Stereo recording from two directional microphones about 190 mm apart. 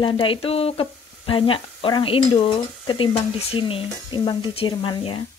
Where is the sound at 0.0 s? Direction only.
30° left (ahead or behind).